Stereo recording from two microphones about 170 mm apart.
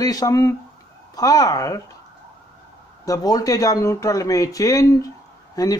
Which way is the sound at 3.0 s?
20° left (ahead or behind).